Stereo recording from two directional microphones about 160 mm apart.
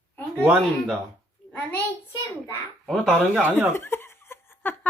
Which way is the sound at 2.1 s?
15° left (ahead or behind).